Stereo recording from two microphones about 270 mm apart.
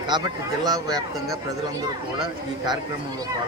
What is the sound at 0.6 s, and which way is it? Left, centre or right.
Speech, centre.